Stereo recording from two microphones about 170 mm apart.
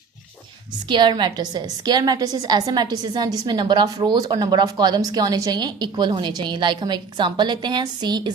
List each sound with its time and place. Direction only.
0.9 s speech: 25° right (ahead or behind)